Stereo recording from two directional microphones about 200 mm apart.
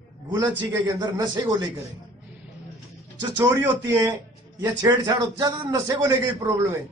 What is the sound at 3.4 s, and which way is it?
Speech, 15° right (ahead or behind).